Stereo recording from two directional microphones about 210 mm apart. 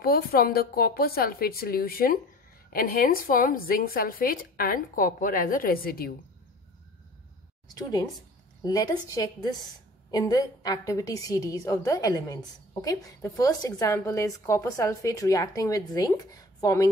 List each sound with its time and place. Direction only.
0.0 s a woman's voice: 45° left (ahead or behind)
7.7 s a woman's voice: 20° left (ahead or behind)